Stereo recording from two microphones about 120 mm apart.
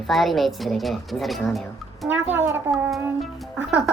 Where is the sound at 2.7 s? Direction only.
Centre (ahead or behind).